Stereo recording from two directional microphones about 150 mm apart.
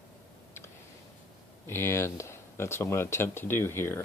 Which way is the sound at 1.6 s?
15° left (ahead or behind).